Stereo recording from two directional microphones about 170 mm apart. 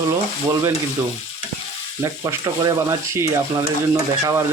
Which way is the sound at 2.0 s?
20° right (ahead or behind).